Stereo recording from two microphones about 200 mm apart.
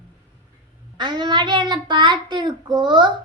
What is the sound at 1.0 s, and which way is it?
Child singing, 20° right (ahead or behind).